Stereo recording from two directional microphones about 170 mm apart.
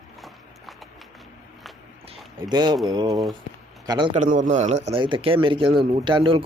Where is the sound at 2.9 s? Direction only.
20° right (ahead or behind).